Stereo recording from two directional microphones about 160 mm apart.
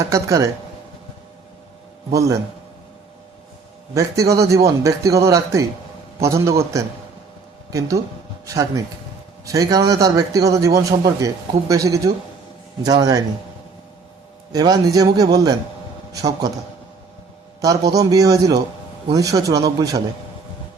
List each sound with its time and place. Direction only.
0.0 s a man's voice: 20° right (ahead or behind)
2.1 s a man's voice: 20° right (ahead or behind)
3.9 s a man's voice: 20° right (ahead or behind)
14.5 s a man's voice: 25° right (ahead or behind)
17.9 s a man's voice: 20° right (ahead or behind)